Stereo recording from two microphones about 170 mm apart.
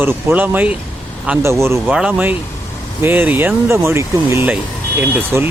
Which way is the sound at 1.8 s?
5° right (ahead or behind).